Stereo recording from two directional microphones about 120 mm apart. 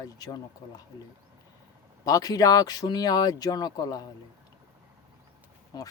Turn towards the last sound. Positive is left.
turn(degrees=35)  # may be behind; listen again after turning